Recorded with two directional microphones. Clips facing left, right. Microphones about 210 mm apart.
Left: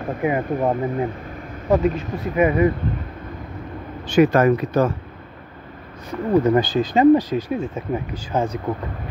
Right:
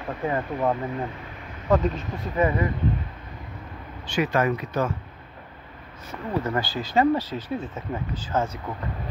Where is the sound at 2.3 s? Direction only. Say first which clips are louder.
Left 6 dB; 20° left (ahead or behind).